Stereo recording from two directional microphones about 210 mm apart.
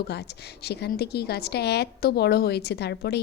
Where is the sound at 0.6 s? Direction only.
50° left (ahead or behind).